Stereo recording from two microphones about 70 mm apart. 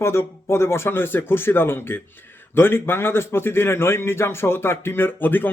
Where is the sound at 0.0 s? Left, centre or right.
Left.